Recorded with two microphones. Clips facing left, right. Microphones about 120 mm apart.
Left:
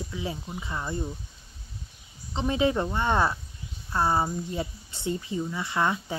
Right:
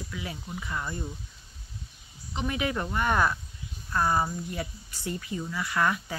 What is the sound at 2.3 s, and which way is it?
Speech, 25° left (ahead or behind).